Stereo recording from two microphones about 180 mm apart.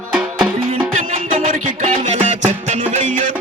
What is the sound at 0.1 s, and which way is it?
Music, 5° right (ahead or behind).